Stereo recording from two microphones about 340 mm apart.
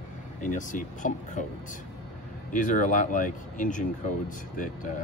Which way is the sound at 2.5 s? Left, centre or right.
Left.